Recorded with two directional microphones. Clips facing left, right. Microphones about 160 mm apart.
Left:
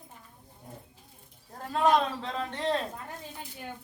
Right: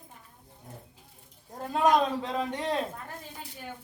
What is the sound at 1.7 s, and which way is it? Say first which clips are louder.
Speech: right 1 dB; 15° right (ahead or behind).